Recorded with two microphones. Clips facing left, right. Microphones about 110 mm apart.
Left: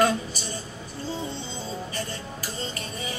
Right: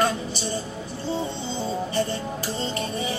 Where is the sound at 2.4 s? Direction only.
30° right (ahead or behind).